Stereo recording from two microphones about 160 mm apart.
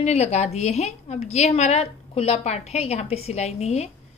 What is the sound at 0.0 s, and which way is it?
A woman's voice, 40° left (ahead or behind).